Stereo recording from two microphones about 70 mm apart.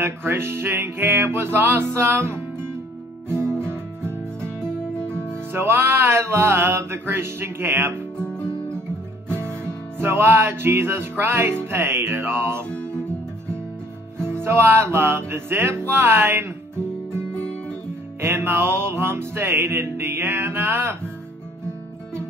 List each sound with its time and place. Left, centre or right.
0.0 s music: right
5.5 s music: right
8.2 s guitar: centre
9.4 s music: right
12.6 s music: centre
14.1 s music: centre
14.4 s music: right